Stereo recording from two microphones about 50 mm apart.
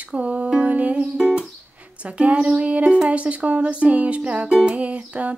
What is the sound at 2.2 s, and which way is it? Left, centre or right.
Speech, right.